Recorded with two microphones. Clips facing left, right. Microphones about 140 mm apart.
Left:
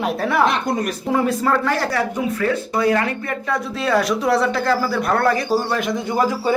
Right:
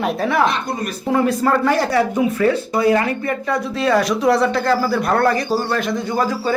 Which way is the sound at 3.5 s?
Centre (ahead or behind).